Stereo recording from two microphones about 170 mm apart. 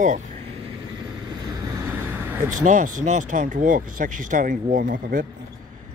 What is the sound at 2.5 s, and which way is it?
Speech, 50° right (ahead or behind).